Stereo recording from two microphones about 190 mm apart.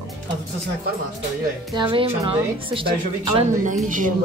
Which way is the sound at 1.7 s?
25° right (ahead or behind).